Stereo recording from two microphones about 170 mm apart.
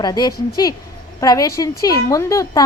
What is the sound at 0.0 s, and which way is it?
A woman's voice, 25° left (ahead or behind).